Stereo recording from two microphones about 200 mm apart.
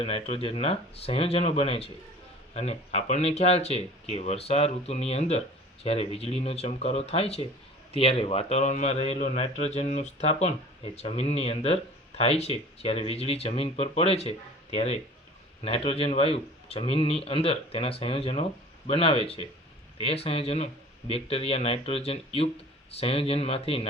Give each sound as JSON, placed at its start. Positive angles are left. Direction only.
{"t": 0.0, "sound": "speech", "side_deg": 30}